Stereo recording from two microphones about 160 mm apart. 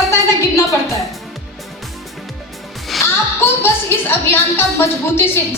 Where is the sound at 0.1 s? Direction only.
15° left (ahead or behind).